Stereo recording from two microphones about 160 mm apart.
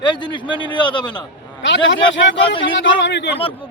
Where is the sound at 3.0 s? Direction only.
90° left.